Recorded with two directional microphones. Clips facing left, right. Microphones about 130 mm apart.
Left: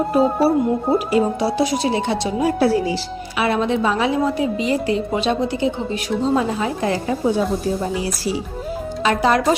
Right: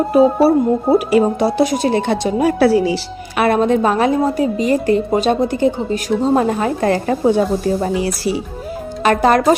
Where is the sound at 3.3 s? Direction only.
50° right (ahead or behind).